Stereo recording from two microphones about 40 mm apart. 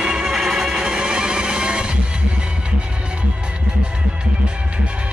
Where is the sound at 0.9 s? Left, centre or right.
Right.